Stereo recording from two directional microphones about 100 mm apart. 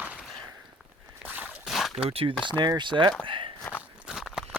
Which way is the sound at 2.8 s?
50° right (ahead or behind).